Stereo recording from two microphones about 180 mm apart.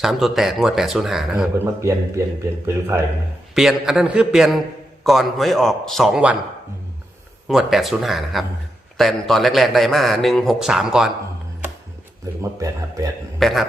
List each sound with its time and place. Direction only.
0.0 s a man's voice: centre (ahead or behind)
1.5 s speech: 15° right (ahead or behind)
3.5 s a man's voice: centre (ahead or behind)
7.4 s a man's voice: centre (ahead or behind)
12.2 s speech: 15° right (ahead or behind)
13.4 s a man's voice: centre (ahead or behind)